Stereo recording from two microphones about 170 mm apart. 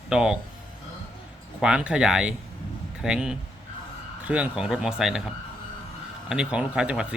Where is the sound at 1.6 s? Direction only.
5° right (ahead or behind).